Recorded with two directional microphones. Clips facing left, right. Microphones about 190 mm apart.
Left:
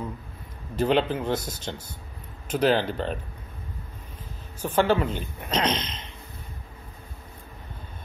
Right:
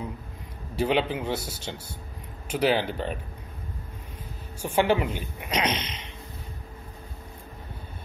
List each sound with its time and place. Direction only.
0.7 s a woman's voice: 10° right (ahead or behind)
4.6 s a woman's voice: 10° right (ahead or behind)